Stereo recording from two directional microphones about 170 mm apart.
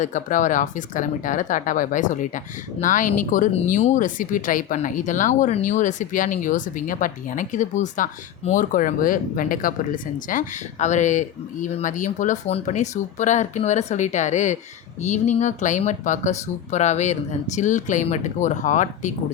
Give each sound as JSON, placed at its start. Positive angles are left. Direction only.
{"t": 0.0, "sound": "speech", "side_deg": 50}